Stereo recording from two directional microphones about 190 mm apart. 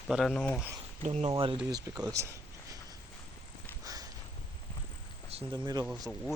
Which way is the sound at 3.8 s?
20° right (ahead or behind).